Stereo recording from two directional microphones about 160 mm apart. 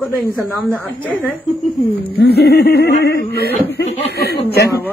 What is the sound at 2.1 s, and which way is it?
Speech, 90° left.